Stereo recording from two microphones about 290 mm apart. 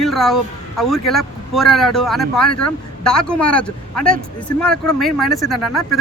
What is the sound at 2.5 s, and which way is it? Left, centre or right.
Speech, left.